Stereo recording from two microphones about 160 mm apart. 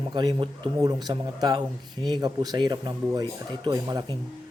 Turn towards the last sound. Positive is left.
turn(degrees=-25)  # may be behind; listen again after turning